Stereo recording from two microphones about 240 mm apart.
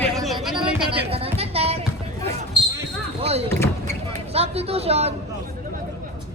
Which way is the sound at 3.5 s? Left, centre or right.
Centre.